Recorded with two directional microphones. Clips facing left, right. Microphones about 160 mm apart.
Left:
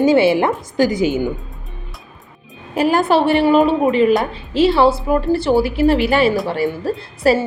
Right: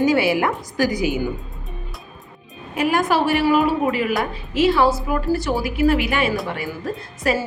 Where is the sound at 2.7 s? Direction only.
30° left (ahead or behind).